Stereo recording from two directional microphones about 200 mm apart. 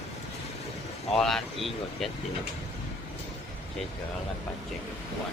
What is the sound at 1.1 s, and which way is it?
Speech, centre (ahead or behind).